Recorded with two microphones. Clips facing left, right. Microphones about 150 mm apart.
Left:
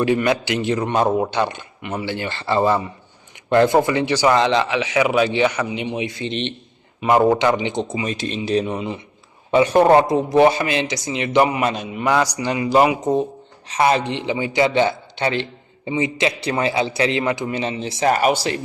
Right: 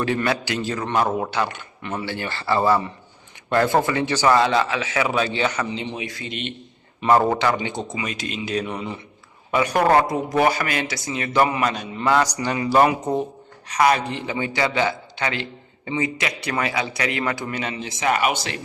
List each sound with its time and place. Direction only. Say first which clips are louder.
0.0 s a man's voice: left 4 dB; 15° left (ahead or behind)
7.0 s a man's voice: left 3 dB; 10° left (ahead or behind)
13.7 s a man's voice: left 1 dB; 25° left (ahead or behind)